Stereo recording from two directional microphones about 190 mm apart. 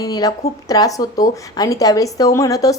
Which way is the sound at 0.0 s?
20° left (ahead or behind).